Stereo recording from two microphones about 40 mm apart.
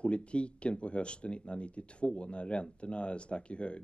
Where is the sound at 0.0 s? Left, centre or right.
Left.